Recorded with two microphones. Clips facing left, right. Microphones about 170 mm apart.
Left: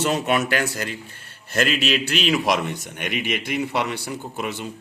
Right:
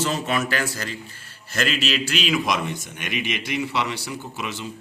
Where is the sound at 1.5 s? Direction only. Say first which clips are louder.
Left 3 dB; 50° left (ahead or behind).